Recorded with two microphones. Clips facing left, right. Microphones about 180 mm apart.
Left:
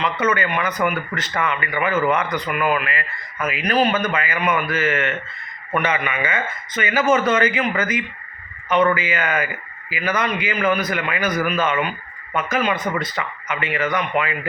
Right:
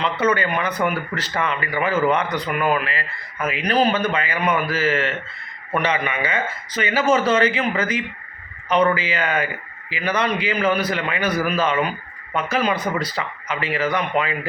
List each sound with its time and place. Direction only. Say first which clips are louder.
0.0 s a man's voice: right 1 dB; 30° right (ahead or behind)